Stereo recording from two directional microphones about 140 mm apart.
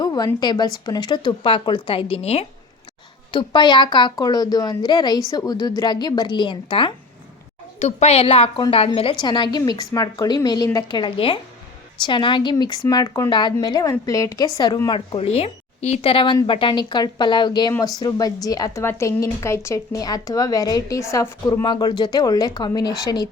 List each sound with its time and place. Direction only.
0.0 s a sound: 30° left (ahead or behind)
0.3 s a woman's voice: 30° left (ahead or behind)
3.3 s a woman's voice: 35° left (ahead or behind)
7.8 s a woman's voice: 50° left (ahead or behind); by 14.8 s 30° left (ahead or behind)
14.8 s a woman's voice: 40° left (ahead or behind)